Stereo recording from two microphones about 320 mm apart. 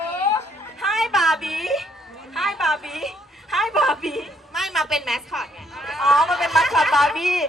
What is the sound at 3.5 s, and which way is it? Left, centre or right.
A woman's voice, centre.